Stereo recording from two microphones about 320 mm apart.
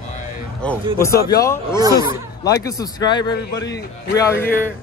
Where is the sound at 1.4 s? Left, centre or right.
Centre.